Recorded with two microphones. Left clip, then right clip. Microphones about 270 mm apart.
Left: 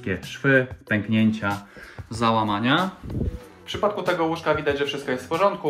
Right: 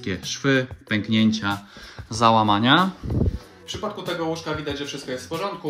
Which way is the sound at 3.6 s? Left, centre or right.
Centre.